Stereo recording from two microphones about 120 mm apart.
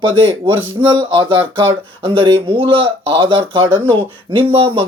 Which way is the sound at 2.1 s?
50° right (ahead or behind).